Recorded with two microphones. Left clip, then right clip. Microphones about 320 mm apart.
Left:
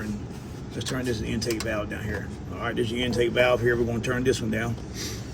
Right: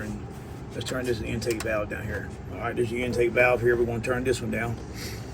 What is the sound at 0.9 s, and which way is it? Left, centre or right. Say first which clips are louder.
Speech: right 1 dB; left.